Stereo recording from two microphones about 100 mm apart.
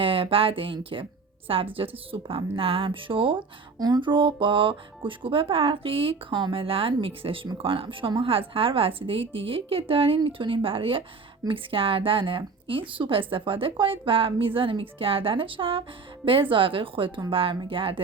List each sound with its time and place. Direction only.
0.0 s a woman's voice: 65° right (ahead or behind)
3.8 s a woman's voice: 40° right (ahead or behind); by 18.0 s 60° right (ahead or behind)